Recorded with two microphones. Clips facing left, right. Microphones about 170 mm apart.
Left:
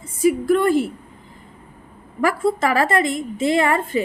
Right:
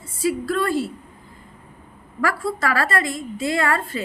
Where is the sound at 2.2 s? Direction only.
20° left (ahead or behind).